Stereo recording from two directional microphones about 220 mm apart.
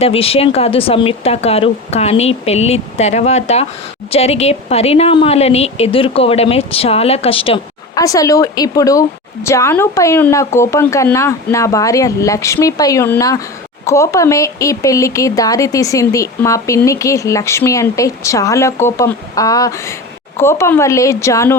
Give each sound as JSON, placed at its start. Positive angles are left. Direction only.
{"t": 0.0, "sound": "a woman's voice", "side_deg": 25}